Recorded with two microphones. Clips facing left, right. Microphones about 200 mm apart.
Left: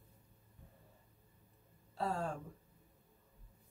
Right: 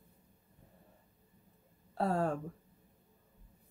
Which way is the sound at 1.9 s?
55° right (ahead or behind).